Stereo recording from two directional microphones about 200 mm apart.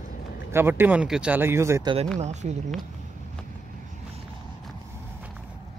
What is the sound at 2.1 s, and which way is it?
Speech, 35° right (ahead or behind).